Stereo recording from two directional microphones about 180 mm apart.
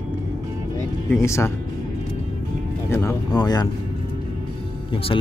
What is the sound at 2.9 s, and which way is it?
Speech, 15° left (ahead or behind).